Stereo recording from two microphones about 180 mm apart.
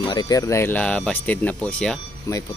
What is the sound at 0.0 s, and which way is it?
Speech, 25° left (ahead or behind).